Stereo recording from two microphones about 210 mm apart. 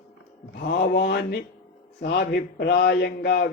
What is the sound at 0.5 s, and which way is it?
Speech, 50° left (ahead or behind).